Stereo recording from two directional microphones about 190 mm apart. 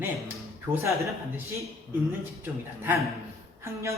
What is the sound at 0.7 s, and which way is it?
Speech, 10° right (ahead or behind).